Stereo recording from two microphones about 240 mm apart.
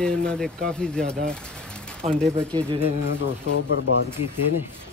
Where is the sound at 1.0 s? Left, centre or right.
Right.